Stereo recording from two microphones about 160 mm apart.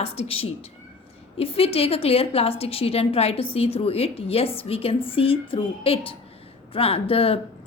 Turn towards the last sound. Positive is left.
turn(degrees=35)  # may be behind; listen again after turning